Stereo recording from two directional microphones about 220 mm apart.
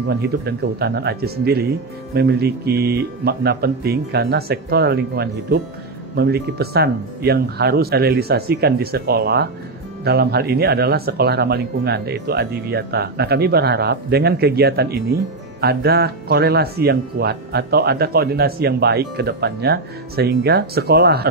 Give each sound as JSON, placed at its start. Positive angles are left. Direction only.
{"t": 0.1, "sound": "speech", "side_deg": -45}